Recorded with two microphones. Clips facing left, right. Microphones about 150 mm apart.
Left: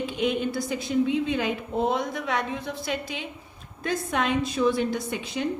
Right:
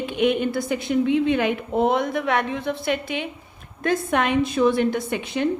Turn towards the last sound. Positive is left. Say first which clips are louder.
# right 5 dB
turn(degrees=-65)  # may be behind; listen again after turning